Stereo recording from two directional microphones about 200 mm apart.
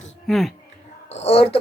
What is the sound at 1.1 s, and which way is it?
Speech, 30° left (ahead or behind).